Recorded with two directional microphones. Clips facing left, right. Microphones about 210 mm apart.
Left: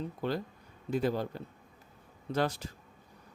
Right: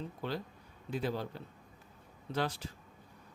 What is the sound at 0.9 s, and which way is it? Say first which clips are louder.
Speech: left 5 dB; 45° left (ahead or behind).